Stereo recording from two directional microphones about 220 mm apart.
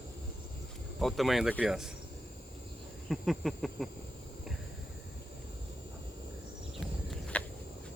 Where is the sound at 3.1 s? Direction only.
Centre (ahead or behind).